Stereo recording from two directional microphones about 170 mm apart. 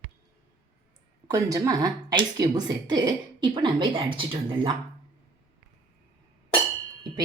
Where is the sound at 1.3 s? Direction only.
20° right (ahead or behind).